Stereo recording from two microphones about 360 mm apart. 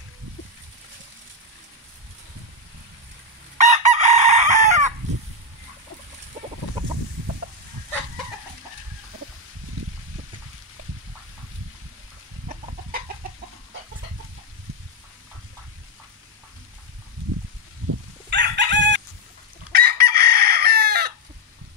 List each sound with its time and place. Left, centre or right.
3.5 s chicken: centre
18.3 s crowing: right
19.7 s chicken: right